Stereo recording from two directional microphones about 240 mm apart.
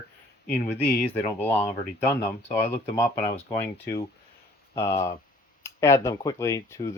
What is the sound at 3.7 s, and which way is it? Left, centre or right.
Speech, centre.